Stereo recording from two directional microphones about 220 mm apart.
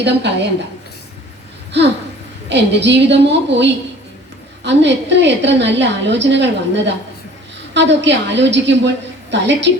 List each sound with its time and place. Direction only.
0.0 s a woman's voice: 50° right (ahead or behind)
1.7 s a woman's voice: 50° right (ahead or behind)